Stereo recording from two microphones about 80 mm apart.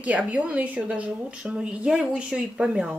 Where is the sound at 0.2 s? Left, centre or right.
Centre.